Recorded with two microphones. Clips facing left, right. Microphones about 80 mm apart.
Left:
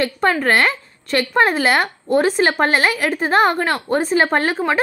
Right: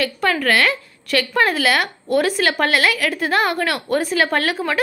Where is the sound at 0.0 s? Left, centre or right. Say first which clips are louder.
Left 2 dB; left.